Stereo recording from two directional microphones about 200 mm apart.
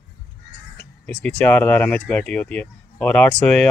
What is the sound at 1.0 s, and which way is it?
Speech, 5° left (ahead or behind).